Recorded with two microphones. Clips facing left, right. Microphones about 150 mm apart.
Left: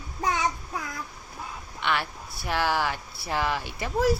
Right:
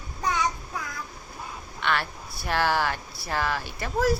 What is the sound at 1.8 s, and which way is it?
Speech, 15° left (ahead or behind).